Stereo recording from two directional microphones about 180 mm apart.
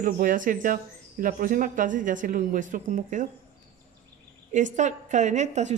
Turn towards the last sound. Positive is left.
turn(degrees=-40)  # may be behind; listen again after turning